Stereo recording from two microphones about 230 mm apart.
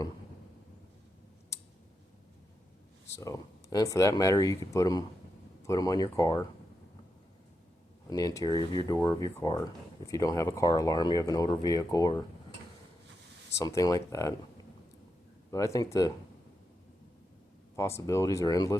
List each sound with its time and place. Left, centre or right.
3.2 s speech: centre
8.1 s speech: centre
13.5 s speech: centre
17.7 s speech: centre